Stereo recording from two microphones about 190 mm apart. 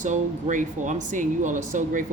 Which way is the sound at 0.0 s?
40° right (ahead or behind).